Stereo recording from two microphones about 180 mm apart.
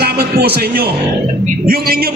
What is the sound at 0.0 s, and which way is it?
A man's voice, 60° right (ahead or behind).